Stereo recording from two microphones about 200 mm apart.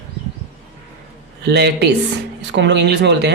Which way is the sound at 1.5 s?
55° right (ahead or behind).